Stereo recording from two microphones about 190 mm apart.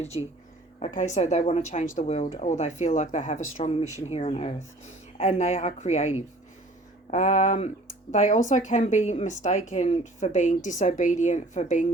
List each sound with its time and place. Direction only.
0.8 s speech: 40° left (ahead or behind)
3.6 s speech: 30° left (ahead or behind)